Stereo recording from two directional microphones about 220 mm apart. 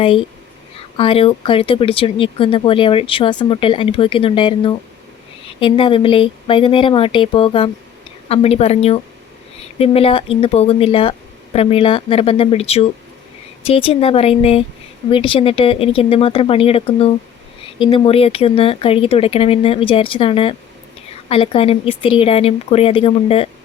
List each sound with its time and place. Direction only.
0.8 s speech: 25° left (ahead or behind)